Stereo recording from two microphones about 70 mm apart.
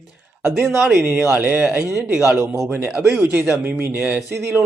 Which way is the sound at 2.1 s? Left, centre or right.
Centre.